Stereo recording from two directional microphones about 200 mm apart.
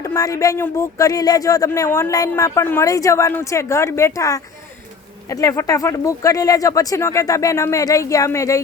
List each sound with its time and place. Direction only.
0.0 s speech: 15° left (ahead or behind)